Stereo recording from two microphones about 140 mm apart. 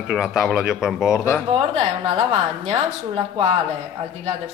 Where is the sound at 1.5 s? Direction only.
40° right (ahead or behind).